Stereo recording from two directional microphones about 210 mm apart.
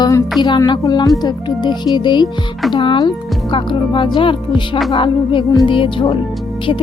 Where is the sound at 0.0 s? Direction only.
15° left (ahead or behind).